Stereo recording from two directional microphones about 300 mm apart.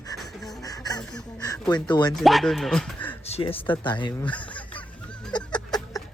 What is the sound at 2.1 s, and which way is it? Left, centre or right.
Speech, centre.